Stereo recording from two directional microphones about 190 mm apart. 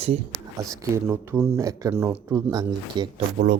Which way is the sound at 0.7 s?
15° right (ahead or behind).